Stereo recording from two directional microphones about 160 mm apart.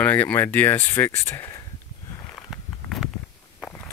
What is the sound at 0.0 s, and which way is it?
Speech, 10° left (ahead or behind).